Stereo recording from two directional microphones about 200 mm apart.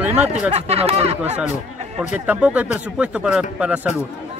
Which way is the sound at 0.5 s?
30° right (ahead or behind).